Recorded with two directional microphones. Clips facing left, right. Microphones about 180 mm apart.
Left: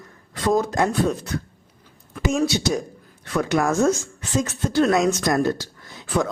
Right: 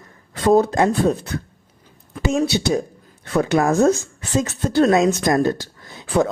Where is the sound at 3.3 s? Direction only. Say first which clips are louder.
Right 4 dB; 20° right (ahead or behind).